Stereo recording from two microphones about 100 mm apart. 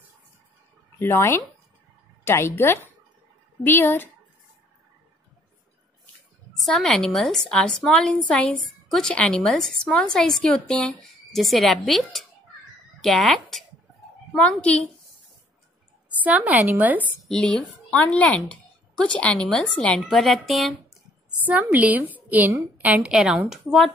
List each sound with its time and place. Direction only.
0.9 s a woman's voice: 25° left (ahead or behind)
6.6 s a woman's voice: 10° left (ahead or behind)
16.2 s a woman's voice: 15° right (ahead or behind)
17.3 s a woman's voice: 5° left (ahead or behind)
21.5 s a woman's voice: 15° right (ahead or behind)